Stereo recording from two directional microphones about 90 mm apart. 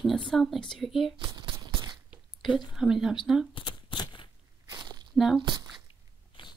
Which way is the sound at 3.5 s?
55° left (ahead or behind).